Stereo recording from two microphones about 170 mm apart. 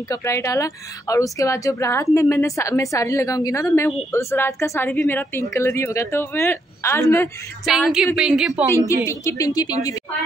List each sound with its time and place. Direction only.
0.1 s a woman's voice: 15° left (ahead or behind)
7.7 s a woman's voice: centre (ahead or behind)
8.7 s speech: 15° left (ahead or behind)